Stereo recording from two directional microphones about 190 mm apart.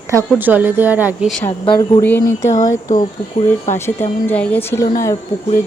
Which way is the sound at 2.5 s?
40° left (ahead or behind).